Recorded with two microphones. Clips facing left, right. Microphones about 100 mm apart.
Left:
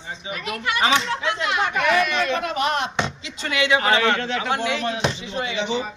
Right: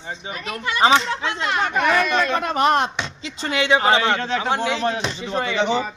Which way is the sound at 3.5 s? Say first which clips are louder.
Right 2 dB; 30° right (ahead or behind).